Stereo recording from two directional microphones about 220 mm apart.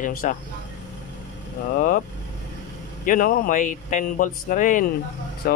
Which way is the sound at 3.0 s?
40° left (ahead or behind).